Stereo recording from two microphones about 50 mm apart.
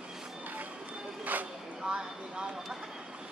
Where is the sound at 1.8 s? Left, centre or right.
Centre.